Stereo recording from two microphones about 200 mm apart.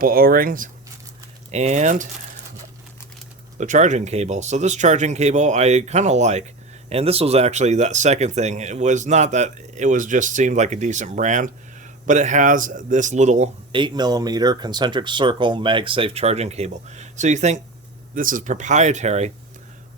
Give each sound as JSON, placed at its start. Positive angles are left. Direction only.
{"t": 0.0, "sound": "speech", "side_deg": -45}
{"t": 1.5, "sound": "speech", "side_deg": -35}
{"t": 3.6, "sound": "speech", "side_deg": -35}